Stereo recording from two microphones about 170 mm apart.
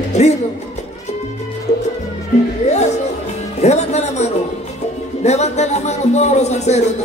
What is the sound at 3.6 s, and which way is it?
Music, 40° left (ahead or behind).